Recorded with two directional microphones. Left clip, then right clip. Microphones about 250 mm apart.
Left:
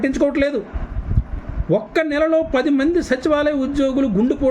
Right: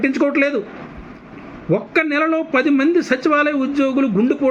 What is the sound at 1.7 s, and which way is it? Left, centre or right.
A man's voice, centre.